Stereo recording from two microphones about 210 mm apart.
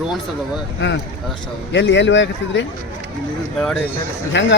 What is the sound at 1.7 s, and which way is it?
Speech, 60° left (ahead or behind).